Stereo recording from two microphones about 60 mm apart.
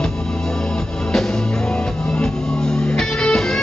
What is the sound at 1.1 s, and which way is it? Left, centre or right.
Music, centre.